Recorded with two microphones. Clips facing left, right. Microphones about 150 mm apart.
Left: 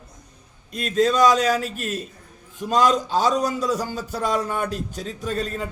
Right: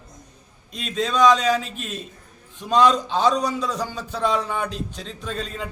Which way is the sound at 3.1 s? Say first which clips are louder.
Even; 5° left (ahead or behind).